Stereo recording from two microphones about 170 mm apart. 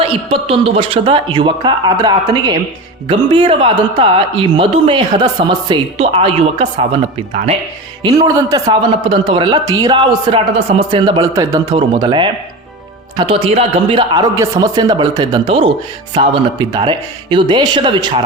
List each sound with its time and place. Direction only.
0.0 s a man's voice: 35° right (ahead or behind)
8.0 s a man's voice: 20° right (ahead or behind)